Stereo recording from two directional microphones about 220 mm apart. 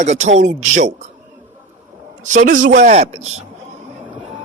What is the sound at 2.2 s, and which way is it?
A man's voice, 35° right (ahead or behind).